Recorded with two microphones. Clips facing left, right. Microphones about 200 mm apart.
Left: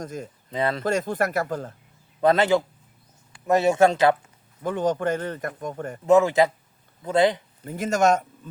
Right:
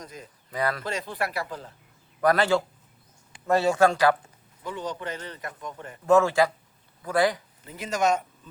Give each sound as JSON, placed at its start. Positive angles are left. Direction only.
{"t": 0.0, "sound": "a man's voice", "side_deg": 45}
{"t": 0.5, "sound": "speech", "side_deg": 25}
{"t": 0.9, "sound": "a man's voice", "side_deg": 45}
{"t": 2.2, "sound": "speech", "side_deg": 20}
{"t": 4.6, "sound": "a man's voice", "side_deg": 50}
{"t": 6.1, "sound": "speech", "side_deg": 20}
{"t": 7.6, "sound": "a man's voice", "side_deg": 50}